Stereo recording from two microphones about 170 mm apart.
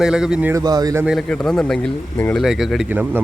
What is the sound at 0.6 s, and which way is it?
Speech, 20° right (ahead or behind).